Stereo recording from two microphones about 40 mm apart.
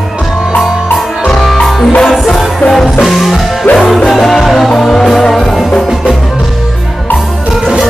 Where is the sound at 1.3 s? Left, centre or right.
Centre.